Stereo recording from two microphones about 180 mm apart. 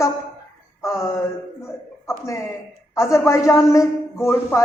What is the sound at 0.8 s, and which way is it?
Mantra, 15° left (ahead or behind).